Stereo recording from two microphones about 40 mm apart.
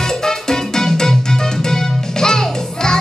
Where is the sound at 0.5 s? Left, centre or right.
Centre.